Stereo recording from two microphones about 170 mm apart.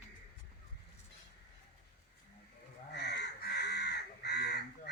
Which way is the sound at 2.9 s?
80° left.